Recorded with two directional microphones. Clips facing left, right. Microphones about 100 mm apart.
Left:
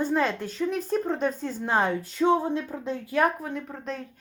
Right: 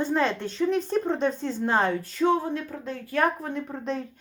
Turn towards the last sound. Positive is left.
turn(degrees=0)  # may be behind; listen again after turning